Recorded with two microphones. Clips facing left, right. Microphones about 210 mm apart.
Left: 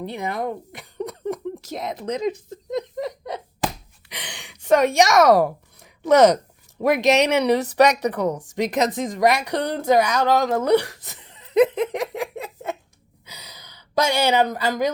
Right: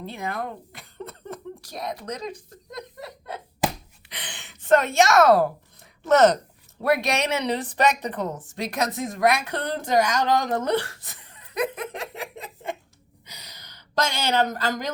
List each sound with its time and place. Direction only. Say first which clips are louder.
0.1 s speech: left 3 dB; 20° left (ahead or behind)
4.4 s a woman's voice: left 3 dB; 15° left (ahead or behind)
13.4 s a sound: left 3 dB; 10° left (ahead or behind)